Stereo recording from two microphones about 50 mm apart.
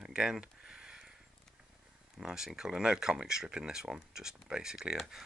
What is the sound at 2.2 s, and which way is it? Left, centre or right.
Speech, centre.